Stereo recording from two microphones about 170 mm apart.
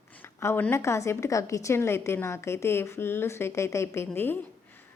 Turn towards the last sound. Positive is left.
turn(degrees=10)  # may be behind; listen again after turning